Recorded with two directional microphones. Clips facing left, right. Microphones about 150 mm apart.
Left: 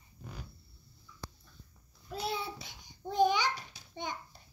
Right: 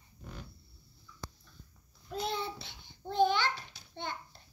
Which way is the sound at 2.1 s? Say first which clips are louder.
Right 1 dB; 5° left (ahead or behind).